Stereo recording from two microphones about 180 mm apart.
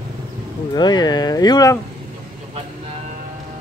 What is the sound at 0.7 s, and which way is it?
Speech, 25° left (ahead or behind).